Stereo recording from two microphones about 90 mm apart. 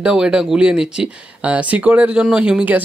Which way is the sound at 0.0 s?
10° right (ahead or behind).